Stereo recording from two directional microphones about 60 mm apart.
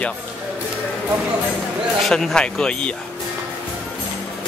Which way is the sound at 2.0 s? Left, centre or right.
Centre.